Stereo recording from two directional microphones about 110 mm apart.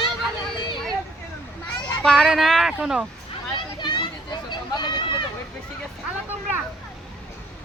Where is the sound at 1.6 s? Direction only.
5° left (ahead or behind).